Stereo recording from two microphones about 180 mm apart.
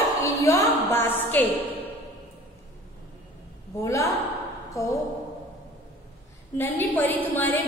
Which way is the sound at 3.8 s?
15° left (ahead or behind).